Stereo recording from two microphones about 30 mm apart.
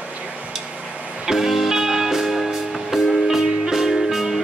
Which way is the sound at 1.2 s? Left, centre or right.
Centre.